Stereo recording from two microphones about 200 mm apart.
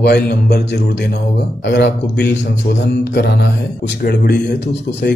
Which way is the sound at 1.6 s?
60° left (ahead or behind).